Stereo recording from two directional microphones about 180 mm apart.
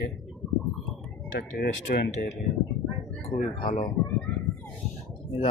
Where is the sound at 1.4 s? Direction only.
60° left (ahead or behind).